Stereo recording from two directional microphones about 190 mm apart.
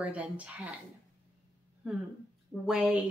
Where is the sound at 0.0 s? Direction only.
5° right (ahead or behind).